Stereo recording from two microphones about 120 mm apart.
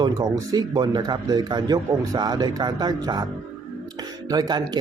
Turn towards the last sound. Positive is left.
turn(degrees=-35)  # may be behind; listen again after turning